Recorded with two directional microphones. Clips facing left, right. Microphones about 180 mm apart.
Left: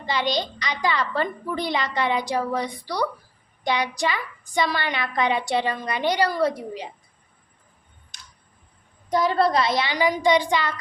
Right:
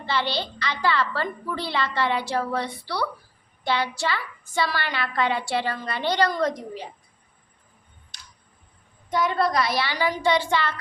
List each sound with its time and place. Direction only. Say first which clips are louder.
0.0 s a woman's voice: left 2 dB; 15° left (ahead or behind)
9.0 s a woman's voice: left 3 dB; 35° left (ahead or behind); by 10.8 s 15° left (ahead or behind)